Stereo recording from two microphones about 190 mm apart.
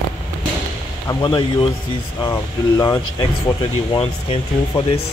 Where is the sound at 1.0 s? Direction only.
25° left (ahead or behind).